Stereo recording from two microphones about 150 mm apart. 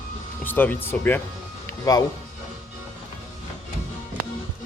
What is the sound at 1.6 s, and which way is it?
Music, 25° left (ahead or behind).